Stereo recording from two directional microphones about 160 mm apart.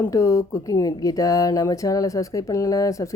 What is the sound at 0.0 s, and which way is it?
Speech, 20° left (ahead or behind).